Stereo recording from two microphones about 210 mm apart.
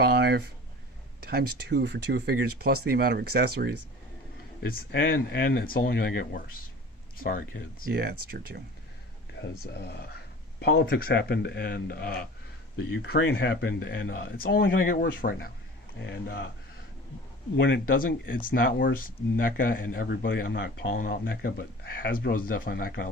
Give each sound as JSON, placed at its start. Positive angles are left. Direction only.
{"t": 0.0, "sound": "speech", "side_deg": -50}
{"t": 1.2, "sound": "a sound", "side_deg": -50}
{"t": 1.7, "sound": "speech", "side_deg": -50}
{"t": 4.6, "sound": "speech", "side_deg": 45}
{"t": 7.9, "sound": "speech", "side_deg": -45}
{"t": 9.4, "sound": "speech", "side_deg": 50}
{"t": 16.0, "sound": "speech", "side_deg": 55}
{"t": 17.6, "sound": "speech", "side_deg": 50}